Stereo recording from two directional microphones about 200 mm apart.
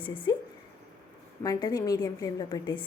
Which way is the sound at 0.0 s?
25° left (ahead or behind).